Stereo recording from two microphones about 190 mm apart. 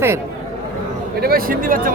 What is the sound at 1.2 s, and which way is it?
Speech, 50° right (ahead or behind).